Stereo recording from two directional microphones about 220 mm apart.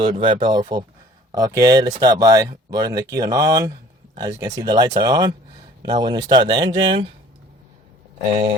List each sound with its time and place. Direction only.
0.0 s speech: 20° right (ahead or behind)